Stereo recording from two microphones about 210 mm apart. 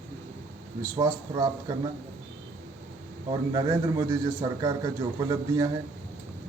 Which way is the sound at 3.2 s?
20° right (ahead or behind).